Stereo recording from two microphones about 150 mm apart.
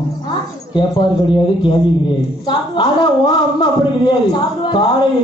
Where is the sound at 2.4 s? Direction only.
30° left (ahead or behind).